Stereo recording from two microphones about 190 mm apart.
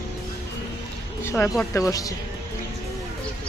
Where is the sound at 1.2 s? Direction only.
15° left (ahead or behind).